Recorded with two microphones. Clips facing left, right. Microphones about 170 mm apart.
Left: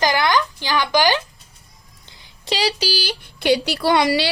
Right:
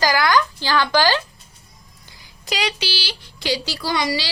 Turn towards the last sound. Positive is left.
turn(degrees=60)  # may be behind; listen again after turning